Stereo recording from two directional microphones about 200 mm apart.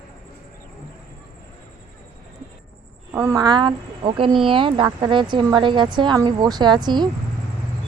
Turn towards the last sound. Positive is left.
turn(degrees=-20)  # may be behind; listen again after turning